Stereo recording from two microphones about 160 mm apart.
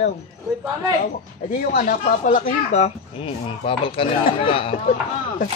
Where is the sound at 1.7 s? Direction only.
60° left (ahead or behind).